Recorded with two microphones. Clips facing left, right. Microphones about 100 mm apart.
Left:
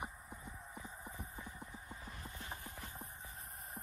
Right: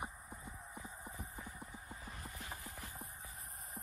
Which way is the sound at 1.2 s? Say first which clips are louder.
Even; 25° left (ahead or behind).